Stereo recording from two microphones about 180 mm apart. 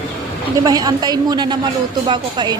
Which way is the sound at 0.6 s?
20° right (ahead or behind).